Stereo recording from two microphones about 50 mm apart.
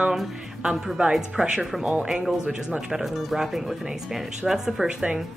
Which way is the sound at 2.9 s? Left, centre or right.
Centre.